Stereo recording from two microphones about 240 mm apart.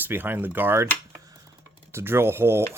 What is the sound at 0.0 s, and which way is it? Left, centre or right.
Speech, centre.